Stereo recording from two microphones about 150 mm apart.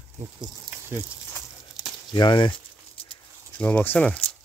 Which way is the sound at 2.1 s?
30° left (ahead or behind).